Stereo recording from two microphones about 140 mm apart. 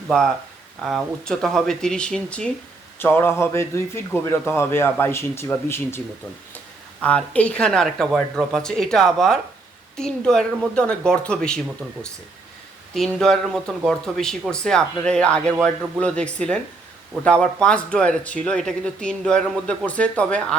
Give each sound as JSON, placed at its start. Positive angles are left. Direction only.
{"t": 0.9, "sound": "speech", "side_deg": 0}
{"t": 3.0, "sound": "speech", "side_deg": 15}
{"t": 7.0, "sound": "speech", "side_deg": 10}
{"t": 12.9, "sound": "speech", "side_deg": 5}